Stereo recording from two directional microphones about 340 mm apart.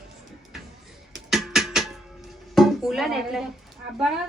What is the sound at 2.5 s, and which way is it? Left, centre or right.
Speech, centre.